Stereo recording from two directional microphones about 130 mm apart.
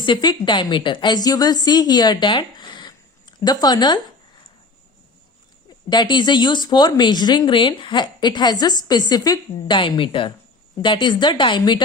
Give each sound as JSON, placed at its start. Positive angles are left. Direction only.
{"t": 0.0, "sound": "a woman's voice", "side_deg": 35}
{"t": 5.9, "sound": "speech", "side_deg": 35}